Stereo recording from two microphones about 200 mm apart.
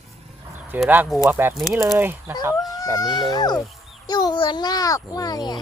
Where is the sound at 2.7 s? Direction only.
20° left (ahead or behind).